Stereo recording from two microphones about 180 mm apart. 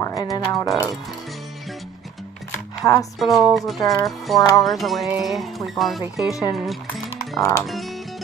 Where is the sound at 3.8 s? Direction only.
20° left (ahead or behind).